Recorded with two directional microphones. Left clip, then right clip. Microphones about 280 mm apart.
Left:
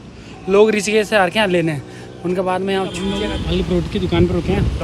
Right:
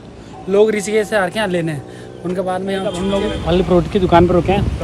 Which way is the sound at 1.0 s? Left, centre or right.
Centre.